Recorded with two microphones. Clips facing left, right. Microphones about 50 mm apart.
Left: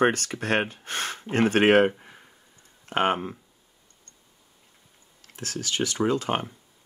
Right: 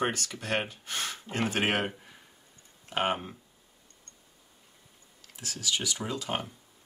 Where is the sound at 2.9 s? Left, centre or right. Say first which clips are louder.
Left 6 dB; left.